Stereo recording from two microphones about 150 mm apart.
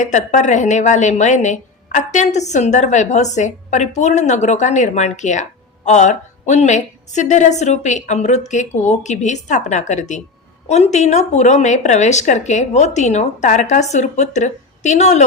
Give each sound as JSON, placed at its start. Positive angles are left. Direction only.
{"t": 0.0, "sound": "a woman's voice", "side_deg": 55}